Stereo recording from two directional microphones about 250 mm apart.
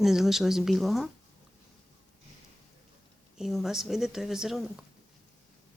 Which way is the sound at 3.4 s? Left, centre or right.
Centre.